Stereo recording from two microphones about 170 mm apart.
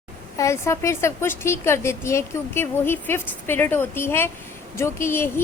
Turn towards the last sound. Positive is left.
turn(degrees=15)  # may be behind; listen again after turning